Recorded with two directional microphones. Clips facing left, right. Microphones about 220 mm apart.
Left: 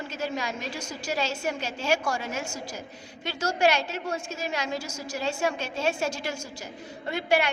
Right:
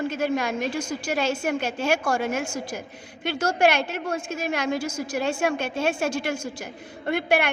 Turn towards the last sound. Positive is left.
turn(degrees=-55)  # may be behind; listen again after turning